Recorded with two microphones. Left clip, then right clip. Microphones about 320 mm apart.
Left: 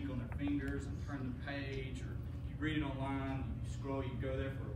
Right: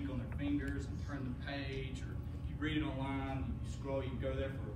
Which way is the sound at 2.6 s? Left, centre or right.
Centre.